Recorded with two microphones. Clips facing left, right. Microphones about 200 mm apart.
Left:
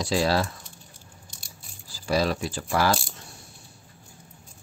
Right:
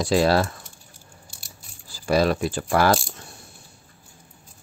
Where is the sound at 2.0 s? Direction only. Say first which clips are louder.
Right 4 dB; 55° right (ahead or behind).